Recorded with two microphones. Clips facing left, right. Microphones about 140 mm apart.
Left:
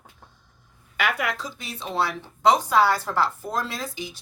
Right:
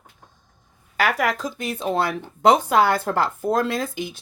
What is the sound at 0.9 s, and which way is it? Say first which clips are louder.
Speech: right 5 dB; 40° right (ahead or behind).